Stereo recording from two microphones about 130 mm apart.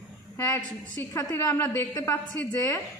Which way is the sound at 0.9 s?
25° left (ahead or behind).